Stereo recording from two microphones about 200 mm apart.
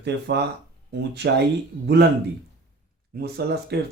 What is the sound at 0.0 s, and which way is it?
Speech, 60° right (ahead or behind).